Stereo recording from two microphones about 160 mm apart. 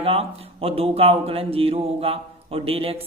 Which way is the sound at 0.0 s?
35° right (ahead or behind).